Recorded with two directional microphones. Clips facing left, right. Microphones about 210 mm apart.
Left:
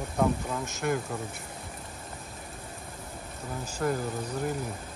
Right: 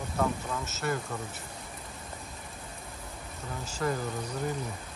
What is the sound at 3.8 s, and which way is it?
Speech, 5° left (ahead or behind).